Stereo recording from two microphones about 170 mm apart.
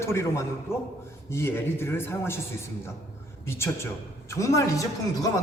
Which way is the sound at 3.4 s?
15° left (ahead or behind).